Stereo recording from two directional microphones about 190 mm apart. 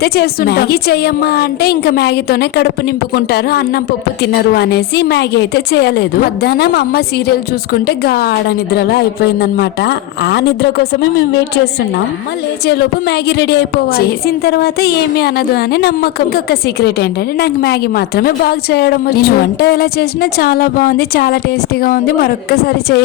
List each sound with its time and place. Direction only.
0.0 s a woman's voice: 55° left (ahead or behind)